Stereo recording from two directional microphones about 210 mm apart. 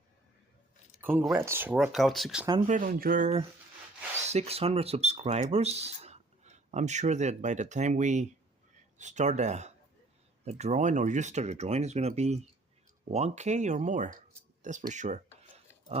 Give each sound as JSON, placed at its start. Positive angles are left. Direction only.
{"t": 1.0, "sound": "speech", "side_deg": -10}
{"t": 2.6, "sound": "speech", "side_deg": -40}